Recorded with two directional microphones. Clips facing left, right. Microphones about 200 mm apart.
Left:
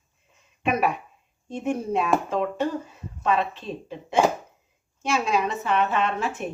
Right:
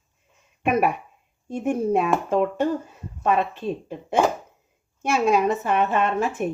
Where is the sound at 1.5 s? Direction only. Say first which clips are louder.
Right 4 dB; 50° right (ahead or behind).